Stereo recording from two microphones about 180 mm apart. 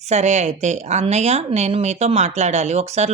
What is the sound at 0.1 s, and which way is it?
Speech, 40° right (ahead or behind).